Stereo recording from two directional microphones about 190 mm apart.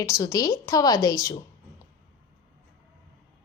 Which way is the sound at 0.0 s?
15° left (ahead or behind).